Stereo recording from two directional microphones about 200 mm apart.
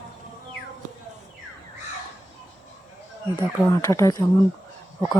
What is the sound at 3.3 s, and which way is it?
Speech, 15° left (ahead or behind).